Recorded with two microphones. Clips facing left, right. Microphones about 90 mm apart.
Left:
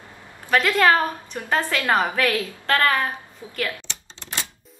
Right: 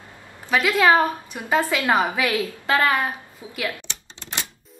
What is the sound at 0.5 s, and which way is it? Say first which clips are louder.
A woman's voice: even; 5° right (ahead or behind).